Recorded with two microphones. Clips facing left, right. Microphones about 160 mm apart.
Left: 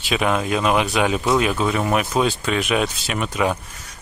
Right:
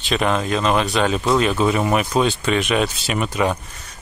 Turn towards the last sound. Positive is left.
turn(degrees=0)  # may be behind; listen again after turning